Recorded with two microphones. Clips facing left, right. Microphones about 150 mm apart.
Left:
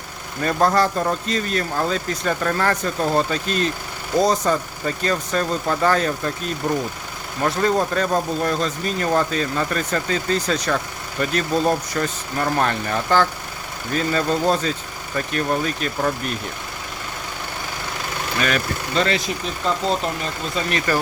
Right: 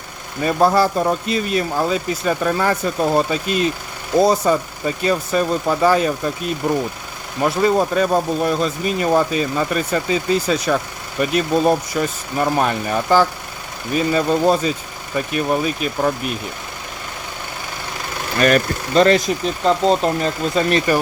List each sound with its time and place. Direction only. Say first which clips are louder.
0.4 s speech: right 3 dB; 10° right (ahead or behind)
18.3 s speech: right 8 dB; 50° right (ahead or behind)
20.9 s speech: right 1 dB; 15° right (ahead or behind)